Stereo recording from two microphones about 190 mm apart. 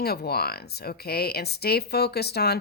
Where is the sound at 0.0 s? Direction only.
55° left (ahead or behind).